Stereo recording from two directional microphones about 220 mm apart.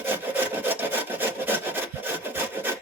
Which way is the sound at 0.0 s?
10° right (ahead or behind).